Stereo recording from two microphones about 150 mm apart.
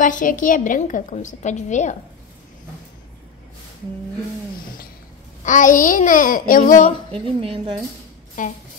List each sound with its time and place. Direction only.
0.0 s a woman's voice: 60° left (ahead or behind)
5.4 s a woman's voice: 60° left (ahead or behind)
7.1 s speech: 40° right (ahead or behind)
8.4 s a woman's voice: 60° left (ahead or behind)